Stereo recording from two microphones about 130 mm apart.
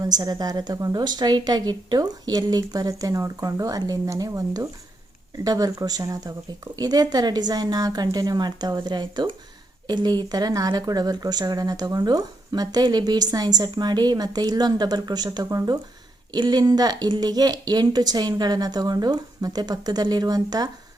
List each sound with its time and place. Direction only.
0.0 s a woman's voice: 30° right (ahead or behind)